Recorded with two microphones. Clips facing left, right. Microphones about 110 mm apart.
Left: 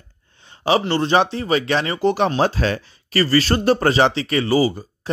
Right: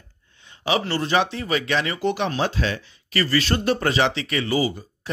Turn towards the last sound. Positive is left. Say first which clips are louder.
# left 5 dB
turn(degrees=35)  # may be behind; listen again after turning